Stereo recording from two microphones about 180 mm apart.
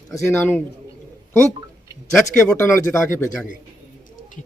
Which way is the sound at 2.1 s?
10° left (ahead or behind).